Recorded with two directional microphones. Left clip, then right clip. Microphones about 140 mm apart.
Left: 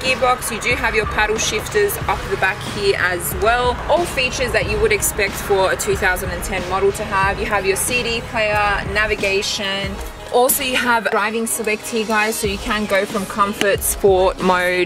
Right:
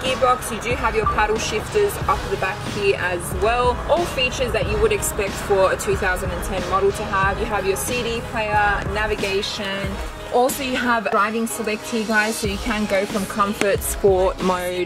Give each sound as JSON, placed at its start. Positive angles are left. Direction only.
{"t": 0.0, "sound": "a woman's voice", "side_deg": 5}